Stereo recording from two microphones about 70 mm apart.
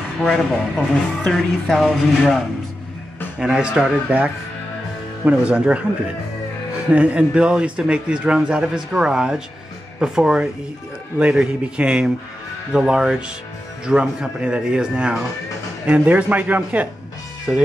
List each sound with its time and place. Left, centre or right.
0.2 s speech: centre
3.3 s a man's voice: centre
5.2 s a man's voice: centre
6.9 s a man's voice: centre